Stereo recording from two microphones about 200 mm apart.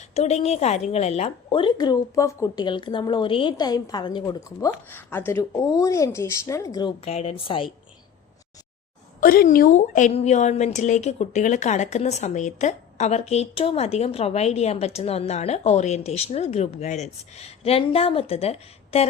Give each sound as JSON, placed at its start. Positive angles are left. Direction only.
{"t": 0.1, "sound": "a woman's voice", "side_deg": 30}
{"t": 7.0, "sound": "a woman's voice", "side_deg": 30}
{"t": 9.2, "sound": "a woman's voice", "side_deg": 45}